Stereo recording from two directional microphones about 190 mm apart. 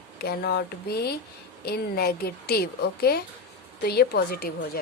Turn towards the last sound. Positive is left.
turn(degrees=55)  # may be behind; listen again after turning